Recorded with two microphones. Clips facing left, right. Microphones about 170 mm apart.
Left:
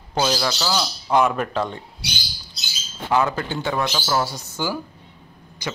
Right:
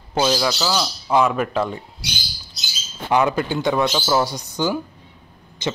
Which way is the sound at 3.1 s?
15° right (ahead or behind).